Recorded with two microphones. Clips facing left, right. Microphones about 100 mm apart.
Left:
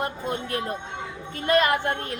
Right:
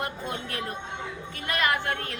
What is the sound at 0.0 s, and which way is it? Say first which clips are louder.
A woman's voice: left 4 dB; 30° left (ahead or behind).